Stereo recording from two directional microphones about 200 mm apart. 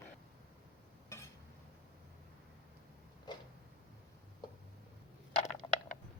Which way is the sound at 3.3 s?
20° left (ahead or behind).